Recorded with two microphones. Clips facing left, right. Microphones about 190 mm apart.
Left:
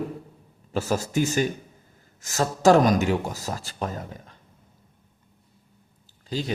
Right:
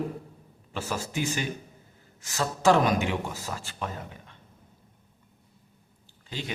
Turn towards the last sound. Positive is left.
turn(degrees=40)  # may be behind; listen again after turning